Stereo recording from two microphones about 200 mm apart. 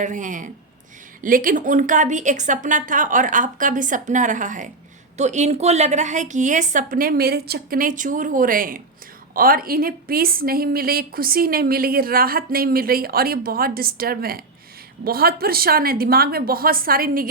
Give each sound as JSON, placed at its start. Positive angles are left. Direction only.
{"t": 0.0, "sound": "a woman's voice", "side_deg": -40}